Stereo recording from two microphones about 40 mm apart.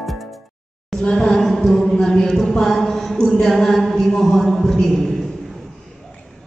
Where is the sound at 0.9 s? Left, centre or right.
Centre.